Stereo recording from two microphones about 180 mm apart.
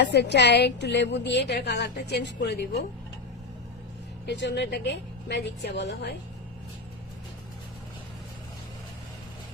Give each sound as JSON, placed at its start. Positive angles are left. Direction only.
{"t": 0.0, "sound": "a woman's voice", "side_deg": 70}
{"t": 4.3, "sound": "a woman's voice", "side_deg": 70}